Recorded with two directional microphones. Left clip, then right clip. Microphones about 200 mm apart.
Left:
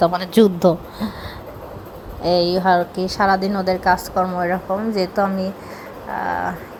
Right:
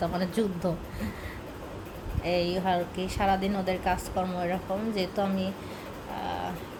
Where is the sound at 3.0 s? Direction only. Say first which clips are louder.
Left 10 dB; 10° left (ahead or behind).